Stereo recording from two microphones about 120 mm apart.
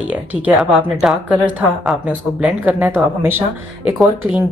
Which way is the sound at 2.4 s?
15° right (ahead or behind).